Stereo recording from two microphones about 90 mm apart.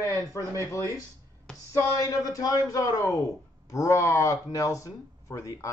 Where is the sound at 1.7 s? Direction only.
40° left (ahead or behind).